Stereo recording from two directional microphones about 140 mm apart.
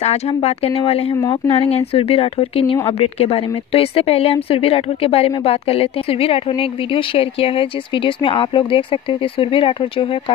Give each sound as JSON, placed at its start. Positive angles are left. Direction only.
{"t": 0.0, "sound": "speech", "side_deg": 50}